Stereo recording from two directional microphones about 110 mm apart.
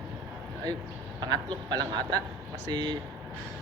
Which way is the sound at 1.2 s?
40° right (ahead or behind).